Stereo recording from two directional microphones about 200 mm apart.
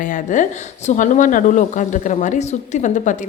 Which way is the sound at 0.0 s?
40° left (ahead or behind).